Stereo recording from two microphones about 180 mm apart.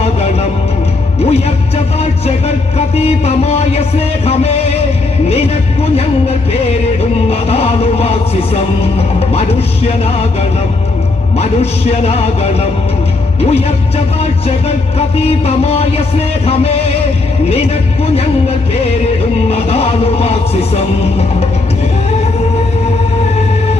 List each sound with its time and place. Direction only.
1.2 s speech: 35° left (ahead or behind)
2.7 s music: 35° left (ahead or behind)
5.8 s music: 35° left (ahead or behind)
7.3 s vehicle: 35° left (ahead or behind)
9.0 s music: 35° left (ahead or behind)
11.3 s music: 35° left (ahead or behind)
14.9 s music: 35° left (ahead or behind)